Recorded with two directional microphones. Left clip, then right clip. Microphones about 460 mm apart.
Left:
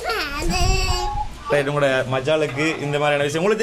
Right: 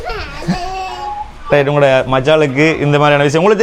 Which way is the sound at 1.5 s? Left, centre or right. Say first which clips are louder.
Right 9 dB; centre.